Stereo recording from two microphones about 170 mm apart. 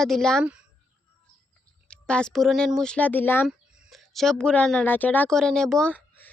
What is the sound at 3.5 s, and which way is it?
Speech, centre (ahead or behind).